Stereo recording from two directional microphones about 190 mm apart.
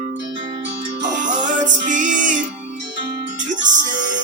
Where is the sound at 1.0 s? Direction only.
40° right (ahead or behind).